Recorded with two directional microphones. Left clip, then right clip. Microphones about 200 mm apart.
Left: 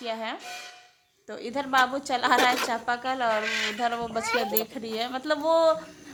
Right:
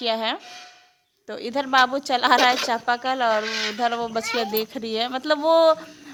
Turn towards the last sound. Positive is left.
turn(degrees=-40)  # may be behind; listen again after turning